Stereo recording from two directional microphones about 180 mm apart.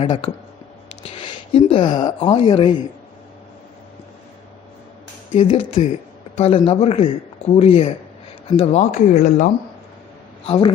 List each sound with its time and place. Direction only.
0.0 s speech: 35° left (ahead or behind)
5.4 s a woman's voice: 30° left (ahead or behind)